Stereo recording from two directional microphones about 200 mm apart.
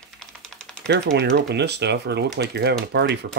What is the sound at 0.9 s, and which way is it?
Speech, 55° right (ahead or behind).